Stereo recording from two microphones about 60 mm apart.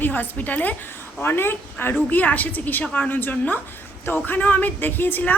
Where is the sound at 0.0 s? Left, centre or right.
Left.